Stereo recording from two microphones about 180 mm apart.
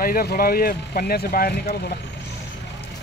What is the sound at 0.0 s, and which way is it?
Speech, 55° left (ahead or behind).